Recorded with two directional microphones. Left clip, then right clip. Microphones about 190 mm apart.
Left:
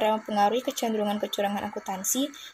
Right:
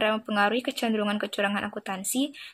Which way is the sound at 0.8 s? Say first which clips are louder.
Even; 5° left (ahead or behind).